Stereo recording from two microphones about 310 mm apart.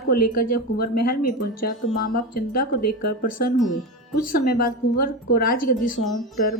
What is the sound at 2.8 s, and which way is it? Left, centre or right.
Speech, left.